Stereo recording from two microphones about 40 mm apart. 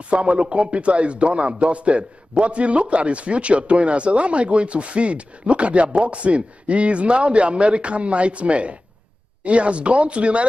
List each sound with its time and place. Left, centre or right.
0.1 s a man's voice: right